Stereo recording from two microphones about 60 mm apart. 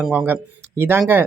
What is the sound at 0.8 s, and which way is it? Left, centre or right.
Speech, right.